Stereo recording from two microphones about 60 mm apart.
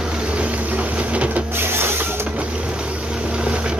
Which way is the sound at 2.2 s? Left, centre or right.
Centre.